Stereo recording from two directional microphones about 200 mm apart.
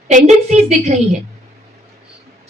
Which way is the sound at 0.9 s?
35° right (ahead or behind).